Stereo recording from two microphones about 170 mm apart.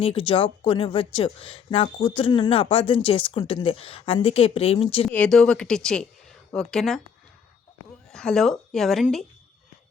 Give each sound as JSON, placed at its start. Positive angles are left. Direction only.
{"t": 0.0, "sound": "speech", "side_deg": 30}
{"t": 5.0, "sound": "speech", "side_deg": 5}
{"t": 8.1, "sound": "speech", "side_deg": 5}